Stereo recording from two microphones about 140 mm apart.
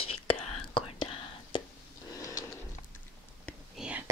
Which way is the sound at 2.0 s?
25° left (ahead or behind).